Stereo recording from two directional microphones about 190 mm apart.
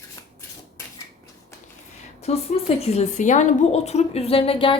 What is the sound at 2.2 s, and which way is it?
A woman's voice, 35° left (ahead or behind).